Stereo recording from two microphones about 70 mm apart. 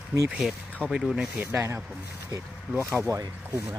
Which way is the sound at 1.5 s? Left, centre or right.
Right.